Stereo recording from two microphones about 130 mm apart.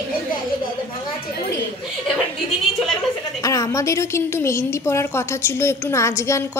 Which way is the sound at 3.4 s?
25° left (ahead or behind).